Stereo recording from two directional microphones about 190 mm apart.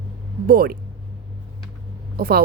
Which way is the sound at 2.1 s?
50° right (ahead or behind).